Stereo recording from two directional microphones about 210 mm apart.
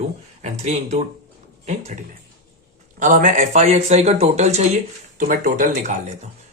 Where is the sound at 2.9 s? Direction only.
35° right (ahead or behind).